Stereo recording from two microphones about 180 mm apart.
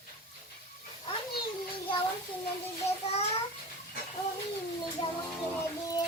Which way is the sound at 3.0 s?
35° left (ahead or behind).